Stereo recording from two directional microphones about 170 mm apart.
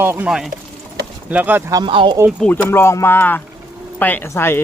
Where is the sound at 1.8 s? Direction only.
30° right (ahead or behind).